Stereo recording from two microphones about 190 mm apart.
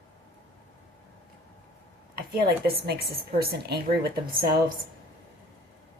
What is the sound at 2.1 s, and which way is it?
A woman's voice, 55° right (ahead or behind).